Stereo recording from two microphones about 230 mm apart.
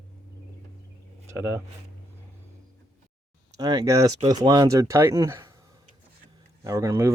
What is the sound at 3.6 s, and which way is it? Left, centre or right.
Speech, centre.